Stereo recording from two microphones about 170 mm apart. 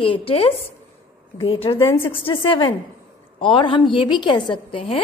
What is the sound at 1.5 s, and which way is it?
A woman's voice, 30° left (ahead or behind).